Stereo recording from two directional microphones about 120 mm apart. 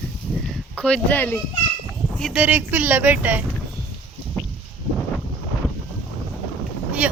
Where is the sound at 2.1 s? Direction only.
Centre (ahead or behind).